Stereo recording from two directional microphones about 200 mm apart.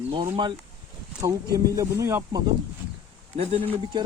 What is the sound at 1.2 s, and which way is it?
Speech, 15° right (ahead or behind).